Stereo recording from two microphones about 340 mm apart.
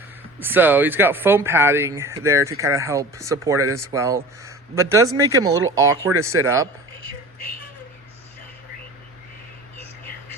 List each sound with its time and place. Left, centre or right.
0.3 s speech: centre